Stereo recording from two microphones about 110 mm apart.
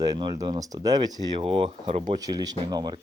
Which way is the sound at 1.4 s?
55° right (ahead or behind).